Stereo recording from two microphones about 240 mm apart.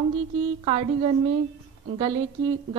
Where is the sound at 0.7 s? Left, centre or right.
Right.